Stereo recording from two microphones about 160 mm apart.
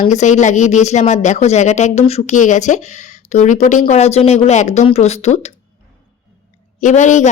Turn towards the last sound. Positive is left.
turn(degrees=50)  # may be behind; listen again after turning